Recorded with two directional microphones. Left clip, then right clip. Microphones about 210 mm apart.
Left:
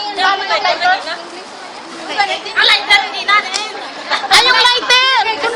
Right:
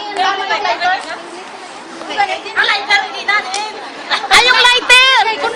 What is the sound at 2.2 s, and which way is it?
Chatter, 15° left (ahead or behind).